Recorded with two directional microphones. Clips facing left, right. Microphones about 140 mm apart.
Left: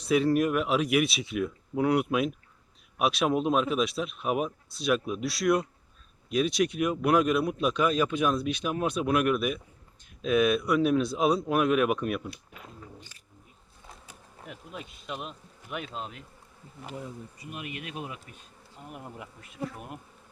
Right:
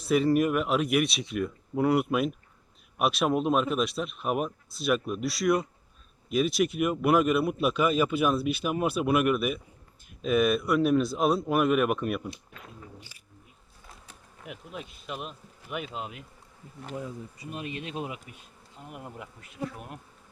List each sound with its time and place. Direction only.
0.0 s speech: centre (ahead or behind)
13.0 s a sound: 10° right (ahead or behind)
14.4 s speech: 5° right (ahead or behind)
17.5 s speech: 30° right (ahead or behind)
18.8 s speech: centre (ahead or behind)